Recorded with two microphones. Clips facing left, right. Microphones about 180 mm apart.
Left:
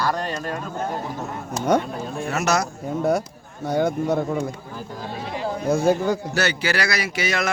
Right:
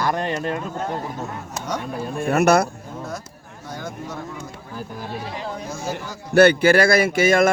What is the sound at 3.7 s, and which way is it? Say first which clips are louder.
Speech: left 12 dB; 60° left (ahead or behind).